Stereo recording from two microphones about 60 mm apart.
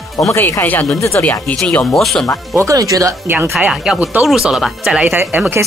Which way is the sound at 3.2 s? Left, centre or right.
Right.